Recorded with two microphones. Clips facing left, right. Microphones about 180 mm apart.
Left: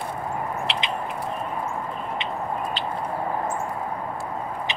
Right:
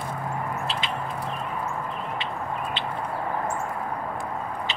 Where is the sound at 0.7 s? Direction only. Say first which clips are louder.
Left 2 dB; 75° left (ahead or behind).